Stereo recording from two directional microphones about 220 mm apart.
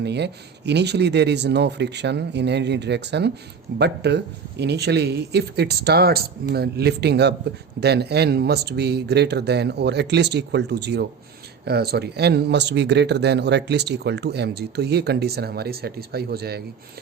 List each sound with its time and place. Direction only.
0.0 s speech: 50° right (ahead or behind)